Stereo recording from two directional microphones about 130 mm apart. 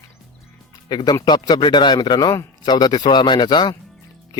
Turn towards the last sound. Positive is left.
turn(degrees=35)  # may be behind; listen again after turning